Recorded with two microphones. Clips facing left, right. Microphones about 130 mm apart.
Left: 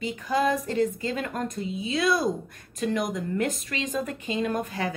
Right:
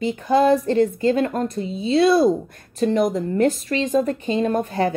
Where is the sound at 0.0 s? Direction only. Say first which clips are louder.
Right 8 dB; 35° right (ahead or behind).